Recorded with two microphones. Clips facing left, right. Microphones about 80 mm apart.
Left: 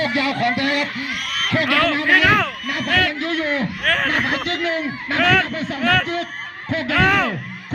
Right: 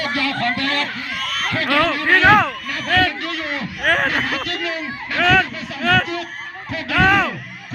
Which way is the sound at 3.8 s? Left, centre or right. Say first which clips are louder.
Right 4 dB; centre.